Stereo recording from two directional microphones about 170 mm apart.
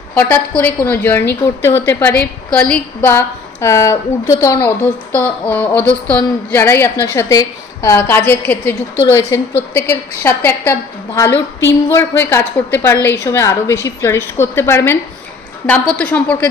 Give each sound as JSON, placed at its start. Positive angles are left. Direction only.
{"t": 0.1, "sound": "a woman's voice", "side_deg": 10}